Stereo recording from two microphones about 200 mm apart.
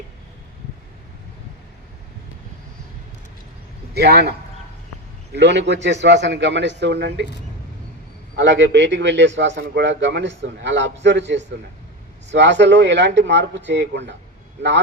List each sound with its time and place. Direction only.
3.9 s a man's voice: 55° right (ahead or behind)
8.4 s a man's voice: 65° right (ahead or behind)